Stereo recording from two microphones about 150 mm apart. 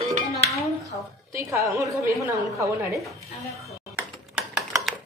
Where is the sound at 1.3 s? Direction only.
20° right (ahead or behind).